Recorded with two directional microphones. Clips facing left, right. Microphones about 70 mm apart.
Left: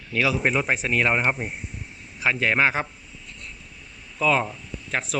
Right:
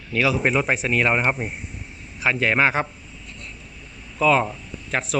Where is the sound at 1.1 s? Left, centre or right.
Right.